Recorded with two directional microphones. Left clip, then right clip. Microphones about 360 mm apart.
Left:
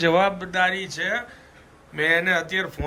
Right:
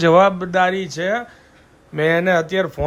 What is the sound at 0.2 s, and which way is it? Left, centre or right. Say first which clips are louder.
Speech: right 6 dB; right.